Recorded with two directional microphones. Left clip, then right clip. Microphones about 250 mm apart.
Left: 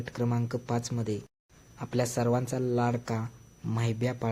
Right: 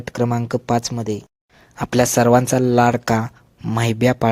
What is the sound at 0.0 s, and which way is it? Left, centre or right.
Speech, right.